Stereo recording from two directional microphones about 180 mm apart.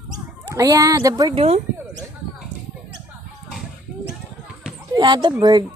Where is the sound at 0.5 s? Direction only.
20° right (ahead or behind).